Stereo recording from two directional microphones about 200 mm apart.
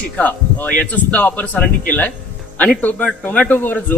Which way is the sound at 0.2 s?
10° left (ahead or behind).